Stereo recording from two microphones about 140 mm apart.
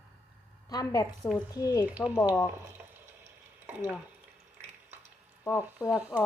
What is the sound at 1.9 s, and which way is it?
Speech, 10° right (ahead or behind).